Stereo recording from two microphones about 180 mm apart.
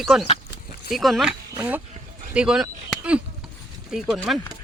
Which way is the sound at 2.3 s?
5° right (ahead or behind).